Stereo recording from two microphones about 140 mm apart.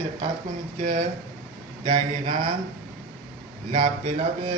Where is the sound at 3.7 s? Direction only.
40° right (ahead or behind).